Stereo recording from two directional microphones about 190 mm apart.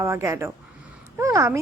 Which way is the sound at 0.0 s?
15° right (ahead or behind).